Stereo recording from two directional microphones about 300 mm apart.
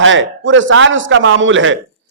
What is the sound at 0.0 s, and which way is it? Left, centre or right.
A man's voice, right.